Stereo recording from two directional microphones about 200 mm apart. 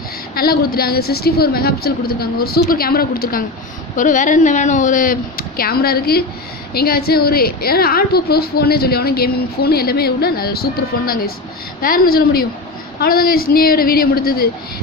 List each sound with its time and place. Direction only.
0.3 s a woman's voice: 50° left (ahead or behind)